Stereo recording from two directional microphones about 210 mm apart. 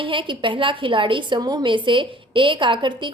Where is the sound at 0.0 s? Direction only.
25° right (ahead or behind).